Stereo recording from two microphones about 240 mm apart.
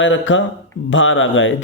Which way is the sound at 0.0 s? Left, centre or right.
Left.